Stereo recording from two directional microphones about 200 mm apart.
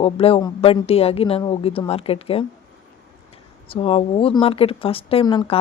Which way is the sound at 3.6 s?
25° left (ahead or behind).